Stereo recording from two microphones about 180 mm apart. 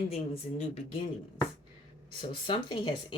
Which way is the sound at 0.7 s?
30° left (ahead or behind).